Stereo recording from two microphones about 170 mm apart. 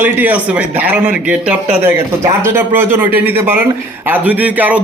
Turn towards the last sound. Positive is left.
turn(degrees=-10)  # may be behind; listen again after turning